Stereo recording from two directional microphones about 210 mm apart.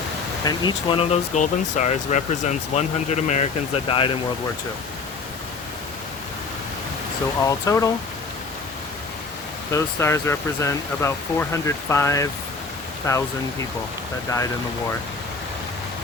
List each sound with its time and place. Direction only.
0.4 s speech: 20° left (ahead or behind)
7.4 s speech: 15° left (ahead or behind)
9.7 s speech: 15° left (ahead or behind)